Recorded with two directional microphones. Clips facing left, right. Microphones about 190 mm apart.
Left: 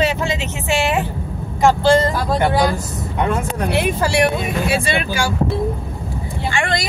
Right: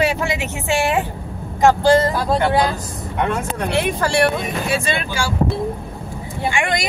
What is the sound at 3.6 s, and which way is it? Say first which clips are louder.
Speech: even; 10° left (ahead or behind).